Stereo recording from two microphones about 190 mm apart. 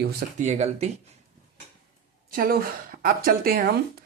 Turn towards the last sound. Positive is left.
turn(degrees=-50)  # may be behind; listen again after turning